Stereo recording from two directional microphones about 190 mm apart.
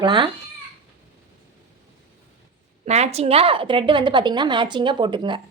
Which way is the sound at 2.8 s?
35° right (ahead or behind).